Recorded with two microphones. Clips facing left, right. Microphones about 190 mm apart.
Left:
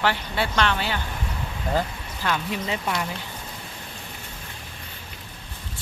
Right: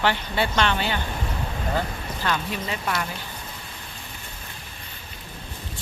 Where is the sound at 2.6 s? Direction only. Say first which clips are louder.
Left 1 dB; 20° left (ahead or behind).